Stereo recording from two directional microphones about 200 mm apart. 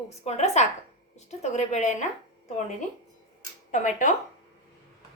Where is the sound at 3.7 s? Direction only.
40° left (ahead or behind).